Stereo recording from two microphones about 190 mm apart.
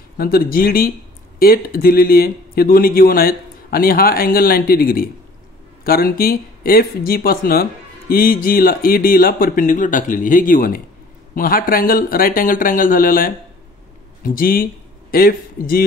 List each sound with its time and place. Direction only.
0.2 s speech: 50° left (ahead or behind)
14.3 s speech: 50° left (ahead or behind)